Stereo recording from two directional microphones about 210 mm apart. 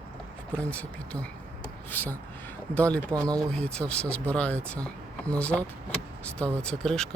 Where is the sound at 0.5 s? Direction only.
5° left (ahead or behind).